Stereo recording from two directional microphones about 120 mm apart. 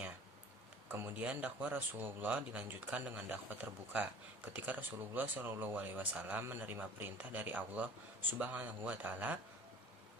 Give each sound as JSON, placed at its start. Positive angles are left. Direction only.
{"t": 0.9, "sound": "speech", "side_deg": -15}